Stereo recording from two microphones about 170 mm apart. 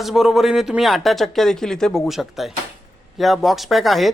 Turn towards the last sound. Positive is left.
turn(degrees=0)  # may be behind; listen again after turning